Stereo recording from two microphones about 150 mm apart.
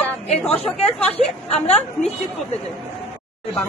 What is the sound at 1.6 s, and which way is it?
Speech, 45° left (ahead or behind).